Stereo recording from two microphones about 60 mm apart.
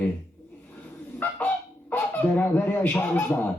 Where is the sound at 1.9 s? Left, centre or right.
Left.